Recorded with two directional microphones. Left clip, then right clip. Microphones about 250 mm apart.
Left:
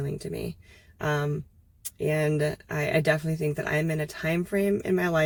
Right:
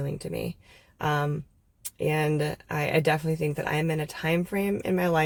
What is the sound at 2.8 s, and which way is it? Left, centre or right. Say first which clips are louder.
Speech: even; centre.